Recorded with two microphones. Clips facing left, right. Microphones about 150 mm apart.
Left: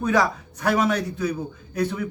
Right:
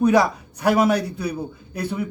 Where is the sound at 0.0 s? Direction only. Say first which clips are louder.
Right 4 dB; 15° right (ahead or behind).